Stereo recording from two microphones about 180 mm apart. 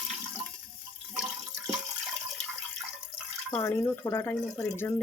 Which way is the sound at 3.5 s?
15° left (ahead or behind).